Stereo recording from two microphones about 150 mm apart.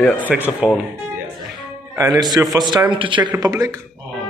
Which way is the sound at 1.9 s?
20° right (ahead or behind).